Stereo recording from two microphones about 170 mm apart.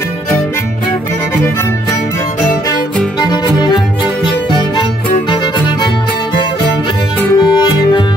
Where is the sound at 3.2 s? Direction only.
25° left (ahead or behind).